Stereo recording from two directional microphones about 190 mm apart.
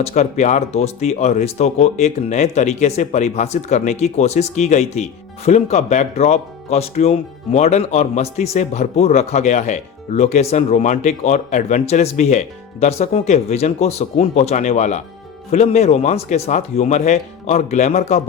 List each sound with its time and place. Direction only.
0.0 s speech: 35° left (ahead or behind)